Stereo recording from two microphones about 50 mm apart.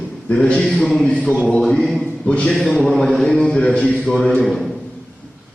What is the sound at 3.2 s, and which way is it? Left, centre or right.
A man's voice, centre.